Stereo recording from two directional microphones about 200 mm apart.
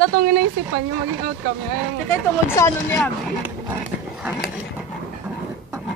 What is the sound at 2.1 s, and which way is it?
Speech, 10° left (ahead or behind).